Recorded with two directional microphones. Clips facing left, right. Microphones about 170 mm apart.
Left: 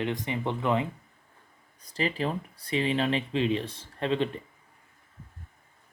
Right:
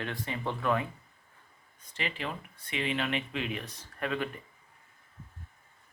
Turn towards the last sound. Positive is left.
turn(degrees=25)  # may be behind; listen again after turning